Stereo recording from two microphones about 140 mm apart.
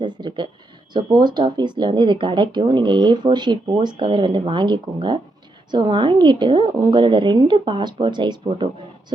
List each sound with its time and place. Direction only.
0.0 s a sound: 35° right (ahead or behind)
0.9 s speech: 30° right (ahead or behind)
8.4 s speech: 45° right (ahead or behind)